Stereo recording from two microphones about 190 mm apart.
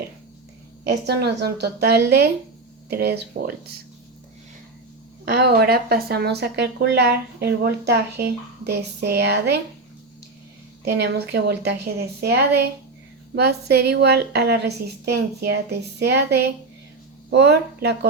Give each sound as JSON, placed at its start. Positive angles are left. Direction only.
{"t": 0.9, "sound": "a woman's voice", "side_deg": -60}
{"t": 5.2, "sound": "a woman's voice", "side_deg": -55}
{"t": 10.8, "sound": "a woman's voice", "side_deg": -60}